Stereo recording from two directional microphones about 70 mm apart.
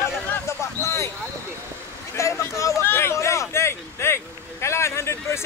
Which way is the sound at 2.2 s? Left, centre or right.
Left.